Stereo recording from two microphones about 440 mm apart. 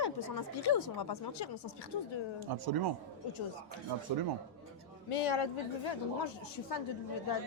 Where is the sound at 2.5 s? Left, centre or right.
Right.